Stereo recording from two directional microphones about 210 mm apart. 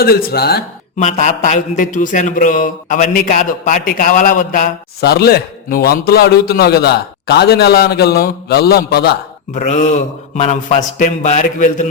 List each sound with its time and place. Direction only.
0.0 s speech: 45° left (ahead or behind)
0.9 s speech: 35° left (ahead or behind)
9.6 s a man's voice: 35° left (ahead or behind)